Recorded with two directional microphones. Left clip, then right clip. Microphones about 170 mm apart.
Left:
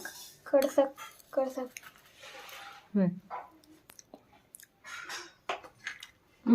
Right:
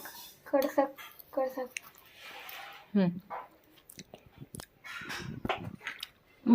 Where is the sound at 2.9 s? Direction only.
Centre (ahead or behind).